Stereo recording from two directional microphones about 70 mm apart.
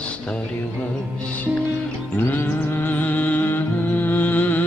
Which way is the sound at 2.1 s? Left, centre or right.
Left.